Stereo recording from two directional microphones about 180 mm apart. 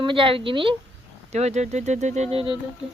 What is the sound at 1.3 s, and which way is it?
Speech, 40° right (ahead or behind).